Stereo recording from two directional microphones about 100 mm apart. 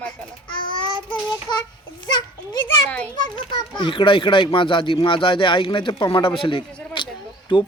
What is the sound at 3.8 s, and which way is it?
Speech, 60° left (ahead or behind).